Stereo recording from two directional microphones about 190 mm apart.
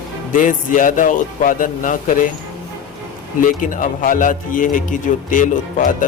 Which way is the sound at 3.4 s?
45° left (ahead or behind).